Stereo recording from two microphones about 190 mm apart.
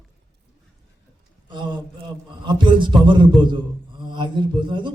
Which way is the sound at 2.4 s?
25° right (ahead or behind).